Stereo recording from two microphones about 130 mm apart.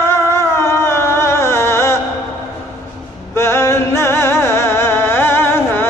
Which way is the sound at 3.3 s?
20° left (ahead or behind).